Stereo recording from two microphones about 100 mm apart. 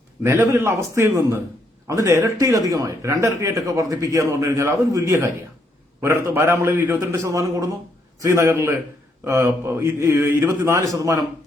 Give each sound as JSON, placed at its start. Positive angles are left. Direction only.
{"t": 0.2, "sound": "a man's voice", "side_deg": -25}
{"t": 7.1, "sound": "a man's voice", "side_deg": -30}